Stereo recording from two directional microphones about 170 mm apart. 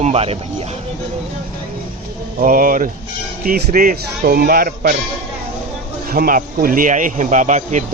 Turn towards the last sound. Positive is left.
turn(degrees=-45)  # may be behind; listen again after turning